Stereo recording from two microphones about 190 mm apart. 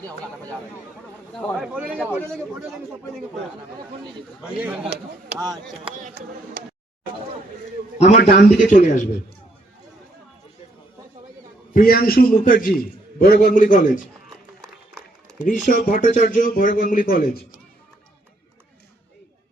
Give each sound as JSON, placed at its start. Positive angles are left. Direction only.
{"t": 1.3, "sound": "speech", "side_deg": 5}
{"t": 1.5, "sound": "speech", "side_deg": -5}
{"t": 2.0, "sound": "speech", "side_deg": 10}
{"t": 4.4, "sound": "speech", "side_deg": -5}
{"t": 5.4, "sound": "speech", "side_deg": -15}
{"t": 6.0, "sound": "speech", "side_deg": -50}
{"t": 7.9, "sound": "a man's voice", "side_deg": 35}
{"t": 8.2, "sound": "a man's voice", "side_deg": 55}
{"t": 11.7, "sound": "a man's voice", "side_deg": 50}
{"t": 15.4, "sound": "a man's voice", "side_deg": 45}